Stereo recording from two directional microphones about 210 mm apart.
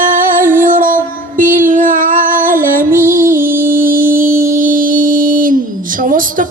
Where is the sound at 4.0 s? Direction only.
40° right (ahead or behind).